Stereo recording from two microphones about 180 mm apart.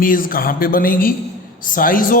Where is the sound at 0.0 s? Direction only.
50° left (ahead or behind).